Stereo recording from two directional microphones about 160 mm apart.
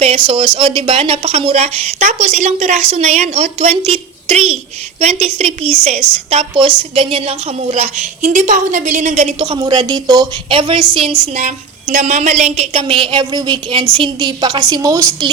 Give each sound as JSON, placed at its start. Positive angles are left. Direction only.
{"t": 0.0, "sound": "a woman's voice", "side_deg": -40}